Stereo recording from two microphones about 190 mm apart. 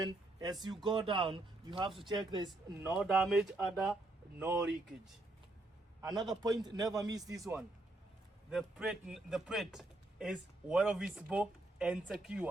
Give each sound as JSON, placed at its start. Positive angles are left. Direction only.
{"t": 0.6, "sound": "a man's voice", "side_deg": -25}
{"t": 3.0, "sound": "a man's voice", "side_deg": -5}
{"t": 4.4, "sound": "speech", "side_deg": -15}
{"t": 6.0, "sound": "a man's voice", "side_deg": -20}
{"t": 8.4, "sound": "a man's voice", "side_deg": 0}